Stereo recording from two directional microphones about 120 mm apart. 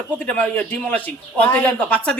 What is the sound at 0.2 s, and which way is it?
A woman's voice, 10° left (ahead or behind).